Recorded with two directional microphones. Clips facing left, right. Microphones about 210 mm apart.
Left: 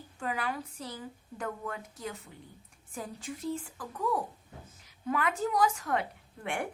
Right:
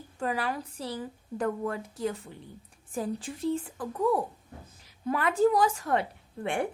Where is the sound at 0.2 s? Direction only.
35° right (ahead or behind).